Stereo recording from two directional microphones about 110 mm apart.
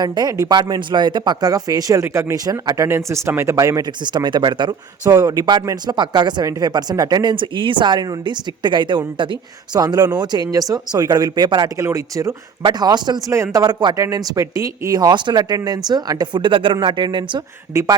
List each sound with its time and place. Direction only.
0.0 s speech: 35° right (ahead or behind)
4.0 s speech: 45° right (ahead or behind)
5.1 s speech: 35° right (ahead or behind)
11.8 s speech: 30° right (ahead or behind)
13.3 s speech: 30° right (ahead or behind); by 17.4 s 45° right (ahead or behind)
17.7 s speech: 30° right (ahead or behind)